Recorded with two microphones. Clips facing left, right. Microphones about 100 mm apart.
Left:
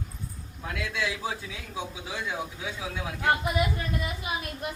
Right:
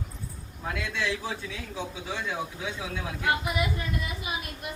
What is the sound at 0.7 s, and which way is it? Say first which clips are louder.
Speech: right 1 dB; 10° left (ahead or behind).